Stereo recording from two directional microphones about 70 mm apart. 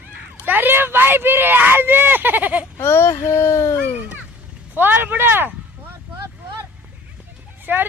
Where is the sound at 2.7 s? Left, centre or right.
Left.